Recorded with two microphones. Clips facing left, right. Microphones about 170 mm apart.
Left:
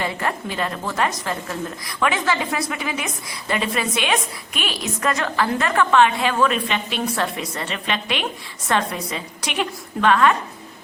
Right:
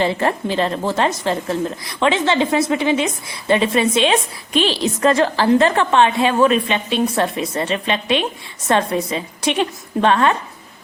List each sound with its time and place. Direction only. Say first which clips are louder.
0.0 s a woman's voice: right 7 dB; 30° right (ahead or behind)